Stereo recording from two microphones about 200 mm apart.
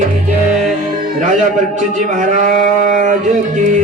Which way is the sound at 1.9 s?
40° right (ahead or behind).